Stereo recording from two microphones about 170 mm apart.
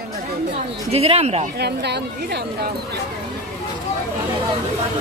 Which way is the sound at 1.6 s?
75° right (ahead or behind).